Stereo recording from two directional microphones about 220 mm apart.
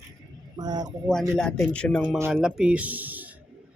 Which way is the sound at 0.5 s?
20° right (ahead or behind).